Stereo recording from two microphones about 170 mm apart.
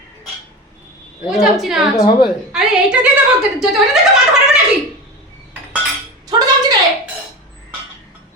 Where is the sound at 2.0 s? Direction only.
25° left (ahead or behind).